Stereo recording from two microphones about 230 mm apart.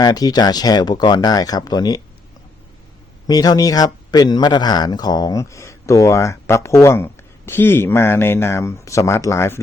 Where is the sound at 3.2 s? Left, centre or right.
Centre.